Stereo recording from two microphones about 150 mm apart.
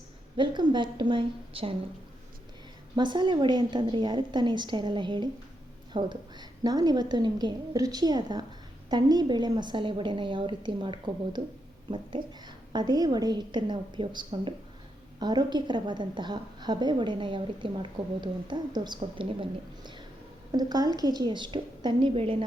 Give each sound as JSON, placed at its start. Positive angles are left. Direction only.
{"t": 0.3, "sound": "a woman's voice", "side_deg": -30}
{"t": 2.9, "sound": "a woman's voice", "side_deg": -30}